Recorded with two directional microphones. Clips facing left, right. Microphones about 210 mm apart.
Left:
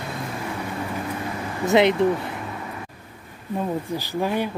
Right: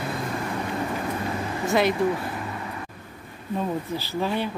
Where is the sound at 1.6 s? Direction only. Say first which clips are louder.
Left 5 dB; 20° left (ahead or behind).